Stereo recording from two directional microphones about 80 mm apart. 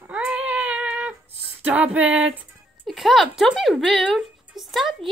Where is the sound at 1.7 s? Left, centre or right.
Centre.